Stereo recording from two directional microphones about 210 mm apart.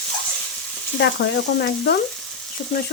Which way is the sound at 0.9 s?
55° left (ahead or behind).